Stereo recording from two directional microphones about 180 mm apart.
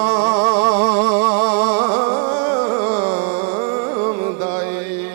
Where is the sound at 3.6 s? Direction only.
25° right (ahead or behind).